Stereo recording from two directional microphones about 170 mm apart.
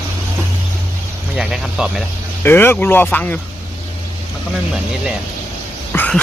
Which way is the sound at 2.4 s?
15° left (ahead or behind).